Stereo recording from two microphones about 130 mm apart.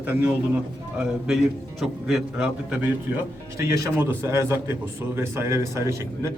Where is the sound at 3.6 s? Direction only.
20° right (ahead or behind).